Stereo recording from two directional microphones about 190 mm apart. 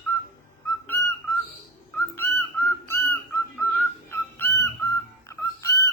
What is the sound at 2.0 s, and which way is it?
Bird, 15° left (ahead or behind).